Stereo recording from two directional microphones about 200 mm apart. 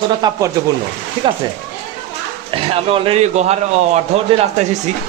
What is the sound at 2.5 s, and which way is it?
A man's voice, 25° right (ahead or behind).